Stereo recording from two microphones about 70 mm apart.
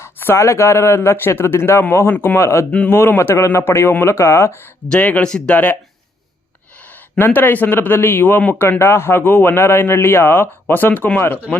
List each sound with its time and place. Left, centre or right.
0.0 s a sound: left
0.4 s a man's voice: left
2.4 s speech: left
2.7 s speech: left
3.0 s a man's voice: left
4.9 s speech: left
6.7 s speech: left
8.8 s a man's voice: left